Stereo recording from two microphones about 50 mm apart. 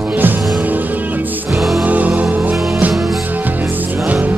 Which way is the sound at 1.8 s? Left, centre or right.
Right.